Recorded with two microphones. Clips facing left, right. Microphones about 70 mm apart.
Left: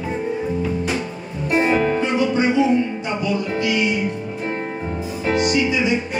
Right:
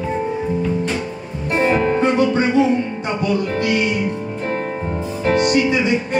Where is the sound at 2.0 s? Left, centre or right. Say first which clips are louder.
Right 3 dB; right.